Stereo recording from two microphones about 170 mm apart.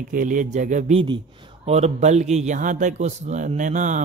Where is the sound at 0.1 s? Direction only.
50° right (ahead or behind).